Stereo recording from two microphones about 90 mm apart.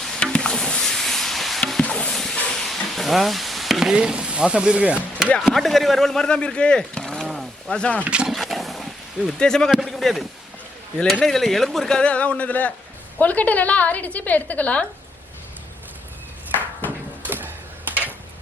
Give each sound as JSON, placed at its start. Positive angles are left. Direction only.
{"t": 0.0, "sound": "a sound", "side_deg": 5}
{"t": 1.6, "sound": "stir", "side_deg": 10}
{"t": 5.4, "sound": "speech", "side_deg": 0}
{"t": 8.0, "sound": "speech", "side_deg": -10}
{"t": 8.3, "sound": "wild animals", "side_deg": 0}
{"t": 9.4, "sound": "a woman's voice", "side_deg": 5}
{"t": 17.2, "sound": "a sound", "side_deg": -20}